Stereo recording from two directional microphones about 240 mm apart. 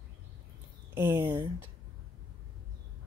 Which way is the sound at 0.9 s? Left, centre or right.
Centre.